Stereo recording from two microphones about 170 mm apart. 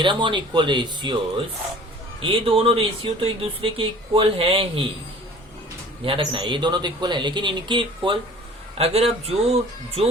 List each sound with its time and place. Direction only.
0.0 s speech: 30° right (ahead or behind)
2.2 s speech: 30° right (ahead or behind)
6.1 s speech: 30° right (ahead or behind)